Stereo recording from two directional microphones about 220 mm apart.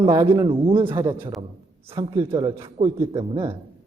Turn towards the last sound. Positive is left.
turn(degrees=-15)  # may be behind; listen again after turning